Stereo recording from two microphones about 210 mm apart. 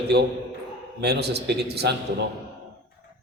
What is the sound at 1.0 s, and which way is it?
Speech, 50° right (ahead or behind).